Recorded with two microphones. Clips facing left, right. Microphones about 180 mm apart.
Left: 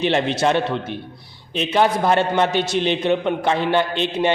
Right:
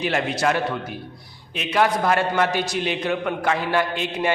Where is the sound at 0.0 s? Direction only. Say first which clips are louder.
Left 4 dB; 25° left (ahead or behind).